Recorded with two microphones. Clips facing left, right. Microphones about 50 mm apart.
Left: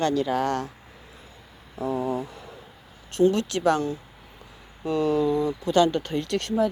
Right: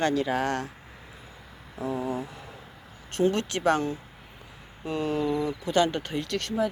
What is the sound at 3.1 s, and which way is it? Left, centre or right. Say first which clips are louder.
Speech: left 4 dB; right.